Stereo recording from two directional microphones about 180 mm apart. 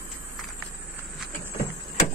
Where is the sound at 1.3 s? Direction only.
55° left (ahead or behind).